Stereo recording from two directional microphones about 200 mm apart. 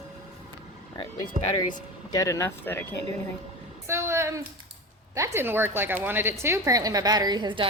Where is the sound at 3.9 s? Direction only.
15° right (ahead or behind).